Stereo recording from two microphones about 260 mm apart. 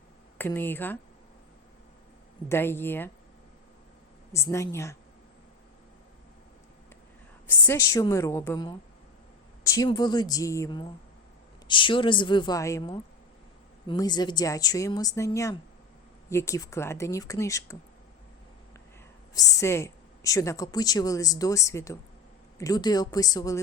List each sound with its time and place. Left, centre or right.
0.3 s speech: centre
2.5 s a woman's voice: centre
4.3 s a woman's voice: centre
7.7 s a woman's voice: centre
19.3 s a woman's voice: centre